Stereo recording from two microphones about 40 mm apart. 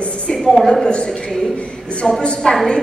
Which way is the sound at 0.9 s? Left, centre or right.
Left.